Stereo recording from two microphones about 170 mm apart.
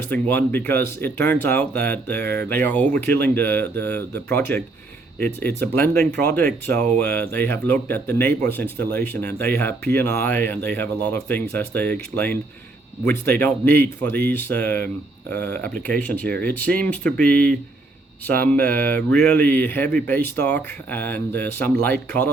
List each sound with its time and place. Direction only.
0.1 s speech: 10° left (ahead or behind)